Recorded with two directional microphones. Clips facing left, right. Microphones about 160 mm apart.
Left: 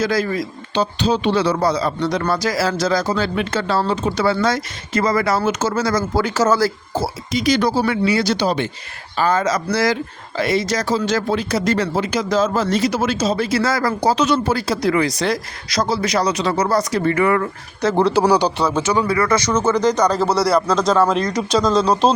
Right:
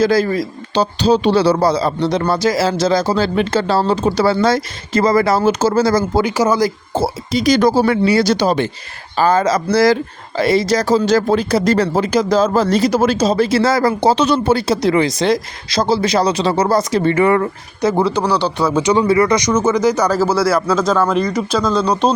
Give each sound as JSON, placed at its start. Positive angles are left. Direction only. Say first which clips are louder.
{"t": 0.0, "sound": "speech", "louder": "right 5 dB", "side_deg": -30}
{"t": 6.2, "sound": "speech", "louder": "right 2 dB", "side_deg": -15}
{"t": 6.9, "sound": "speech", "louder": "right 4 dB", "side_deg": -25}
{"t": 7.4, "sound": "speech", "louder": "right 5 dB", "side_deg": -40}
{"t": 9.1, "sound": "speech", "louder": "right 4 dB", "side_deg": -35}
{"t": 17.8, "sound": "speech", "louder": "right 1 dB", "side_deg": -10}
{"t": 18.1, "sound": "speech", "louder": "left 2 dB", "side_deg": 10}
{"t": 18.8, "sound": "speech", "louder": "right 7 dB", "side_deg": -20}